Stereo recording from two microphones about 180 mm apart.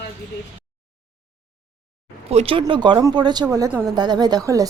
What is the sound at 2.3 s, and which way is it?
Speech, 35° right (ahead or behind).